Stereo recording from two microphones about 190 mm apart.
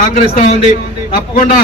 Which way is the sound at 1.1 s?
45° left (ahead or behind).